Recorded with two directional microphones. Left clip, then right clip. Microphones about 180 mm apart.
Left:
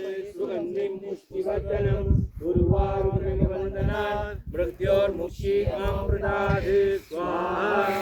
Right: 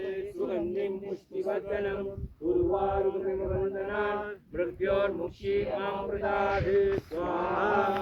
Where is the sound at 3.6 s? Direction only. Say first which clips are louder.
Left 2 dB; 45° left (ahead or behind).